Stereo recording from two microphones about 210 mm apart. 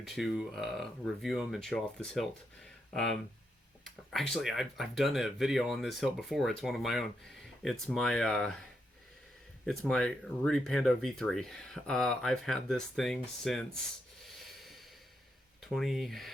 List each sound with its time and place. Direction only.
0.1 s speech: centre (ahead or behind)
4.1 s speech: centre (ahead or behind)
9.6 s speech: centre (ahead or behind)
14.6 s a sound: centre (ahead or behind)
15.6 s speech: centre (ahead or behind)